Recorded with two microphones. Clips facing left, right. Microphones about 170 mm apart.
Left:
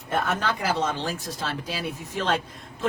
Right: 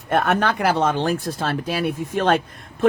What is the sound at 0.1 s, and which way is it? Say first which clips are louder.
Speech: right 7 dB; 65° right (ahead or behind).